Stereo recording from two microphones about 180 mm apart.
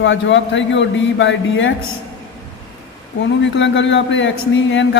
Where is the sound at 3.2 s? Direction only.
90° left.